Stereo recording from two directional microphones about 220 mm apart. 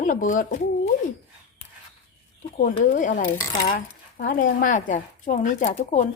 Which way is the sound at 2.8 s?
35° left (ahead or behind).